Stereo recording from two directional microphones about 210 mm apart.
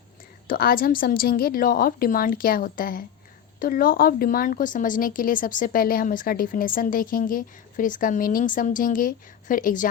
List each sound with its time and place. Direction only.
0.4 s a woman's voice: 45° left (ahead or behind)